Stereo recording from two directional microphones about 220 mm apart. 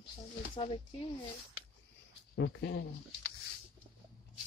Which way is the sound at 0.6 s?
25° left (ahead or behind).